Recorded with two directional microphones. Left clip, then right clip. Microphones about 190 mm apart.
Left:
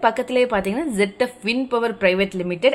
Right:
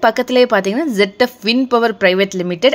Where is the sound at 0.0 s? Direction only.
30° right (ahead or behind).